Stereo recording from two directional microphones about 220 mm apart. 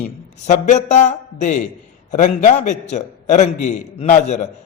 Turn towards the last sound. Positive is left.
turn(degrees=30)  # may be behind; listen again after turning